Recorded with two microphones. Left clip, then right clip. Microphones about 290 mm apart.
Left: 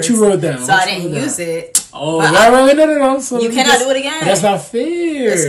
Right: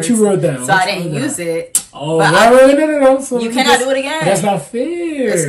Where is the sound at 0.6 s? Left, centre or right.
Centre.